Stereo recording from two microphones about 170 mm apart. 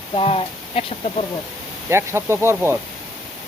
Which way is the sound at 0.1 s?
35° left (ahead or behind).